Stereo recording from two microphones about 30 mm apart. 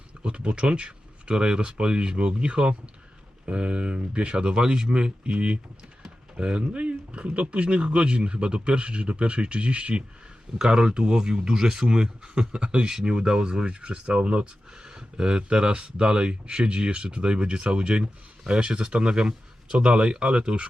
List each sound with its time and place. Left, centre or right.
0.2 s a sound: right
0.7 s speech: right
10.6 s speech: right
11.9 s speech: right
14.8 s speech: right